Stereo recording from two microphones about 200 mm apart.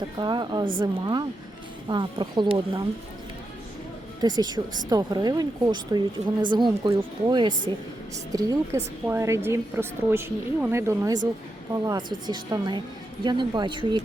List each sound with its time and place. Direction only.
0.2 s speech: 20° right (ahead or behind)
4.2 s speech: 20° right (ahead or behind)